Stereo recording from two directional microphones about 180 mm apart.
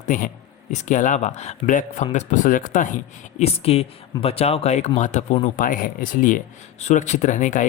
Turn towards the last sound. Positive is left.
turn(degrees=45)  # may be behind; listen again after turning